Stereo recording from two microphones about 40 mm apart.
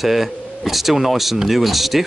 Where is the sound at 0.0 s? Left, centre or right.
Centre.